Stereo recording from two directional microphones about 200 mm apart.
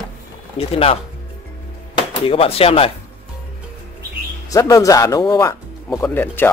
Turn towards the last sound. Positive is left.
turn(degrees=10)  # may be behind; listen again after turning